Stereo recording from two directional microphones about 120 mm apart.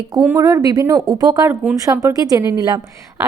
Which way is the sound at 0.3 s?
30° right (ahead or behind).